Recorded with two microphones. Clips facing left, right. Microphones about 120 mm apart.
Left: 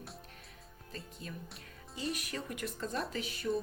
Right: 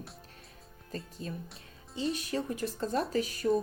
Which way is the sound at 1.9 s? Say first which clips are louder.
Right 6 dB; 25° right (ahead or behind).